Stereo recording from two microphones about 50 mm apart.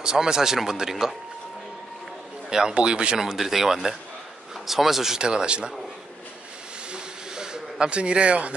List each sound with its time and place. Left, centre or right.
0.0 s speech: centre
2.5 s speech: centre
3.2 s speech: centre
6.9 s hiss: centre
7.8 s a man's voice: right